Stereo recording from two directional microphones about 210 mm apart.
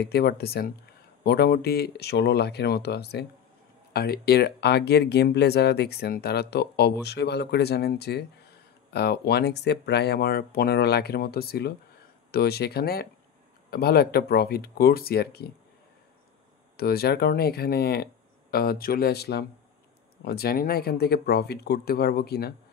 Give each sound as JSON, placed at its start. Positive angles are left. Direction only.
{"t": 0.0, "sound": "speech", "side_deg": 50}
{"t": 16.7, "sound": "speech", "side_deg": 50}